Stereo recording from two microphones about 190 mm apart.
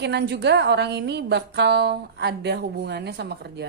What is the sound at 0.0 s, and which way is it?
A woman's voice, 60° right (ahead or behind).